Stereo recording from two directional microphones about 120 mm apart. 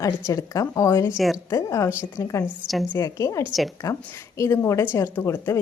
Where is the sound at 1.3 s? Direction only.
30° left (ahead or behind).